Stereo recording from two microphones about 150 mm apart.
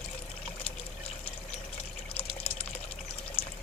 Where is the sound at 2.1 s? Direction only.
40° left (ahead or behind).